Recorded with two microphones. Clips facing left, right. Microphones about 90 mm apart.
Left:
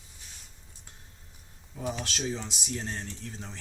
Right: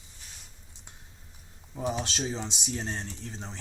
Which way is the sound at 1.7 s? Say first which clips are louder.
Right 3 dB; 25° right (ahead or behind).